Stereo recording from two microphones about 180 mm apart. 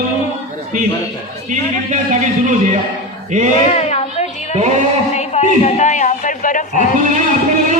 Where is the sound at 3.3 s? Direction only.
45° right (ahead or behind).